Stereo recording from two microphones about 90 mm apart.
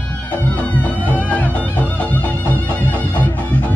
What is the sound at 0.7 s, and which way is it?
Music, 15° left (ahead or behind).